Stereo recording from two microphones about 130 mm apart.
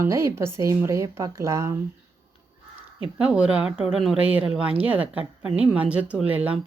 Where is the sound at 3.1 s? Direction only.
10° right (ahead or behind).